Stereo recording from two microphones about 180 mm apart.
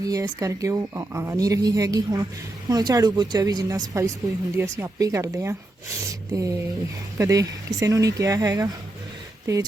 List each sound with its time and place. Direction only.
0.0 s speech: 20° right (ahead or behind)